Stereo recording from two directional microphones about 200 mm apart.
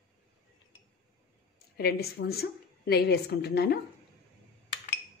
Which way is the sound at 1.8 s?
50° left (ahead or behind).